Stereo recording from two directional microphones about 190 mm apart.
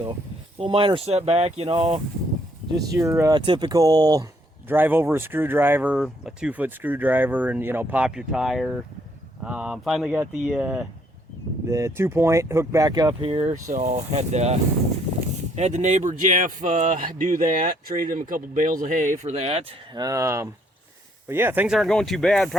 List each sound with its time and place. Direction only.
0.6 s speech: 25° right (ahead or behind)
2.9 s speech: 15° right (ahead or behind)
11.6 s speech: 15° right (ahead or behind)
13.2 s speech: 30° right (ahead or behind)
20.0 s speech: 15° right (ahead or behind); by 22.4 s centre (ahead or behind)